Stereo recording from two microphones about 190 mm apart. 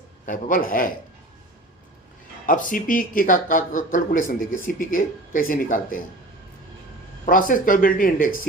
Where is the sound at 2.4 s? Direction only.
45° left (ahead or behind).